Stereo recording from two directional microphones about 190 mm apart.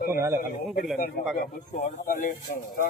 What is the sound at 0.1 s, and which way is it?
Speech, 10° right (ahead or behind).